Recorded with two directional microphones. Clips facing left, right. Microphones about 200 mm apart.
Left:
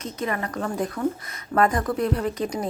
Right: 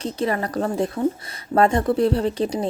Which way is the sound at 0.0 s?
30° right (ahead or behind).